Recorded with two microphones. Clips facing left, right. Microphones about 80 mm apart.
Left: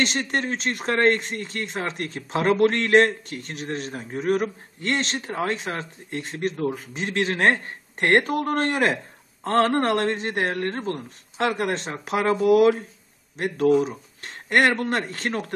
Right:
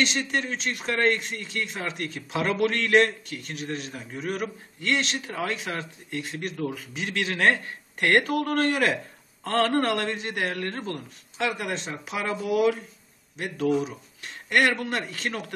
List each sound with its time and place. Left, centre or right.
0.0 s speech: left
11.3 s speech: left
13.4 s speech: left